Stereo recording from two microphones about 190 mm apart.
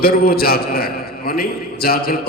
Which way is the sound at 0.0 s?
55° left (ahead or behind).